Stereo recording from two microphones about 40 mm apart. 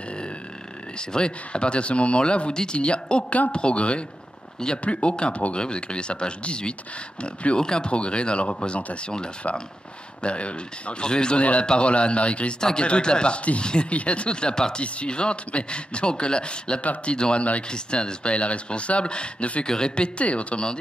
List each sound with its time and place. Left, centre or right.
0.9 s speech: left
3.3 s speech: left
16.8 s speech: left
17.1 s speech: left